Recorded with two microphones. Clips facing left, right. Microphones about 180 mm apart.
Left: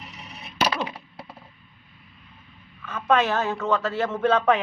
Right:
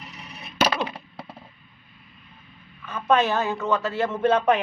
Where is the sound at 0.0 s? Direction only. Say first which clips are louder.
Even; 25° left (ahead or behind).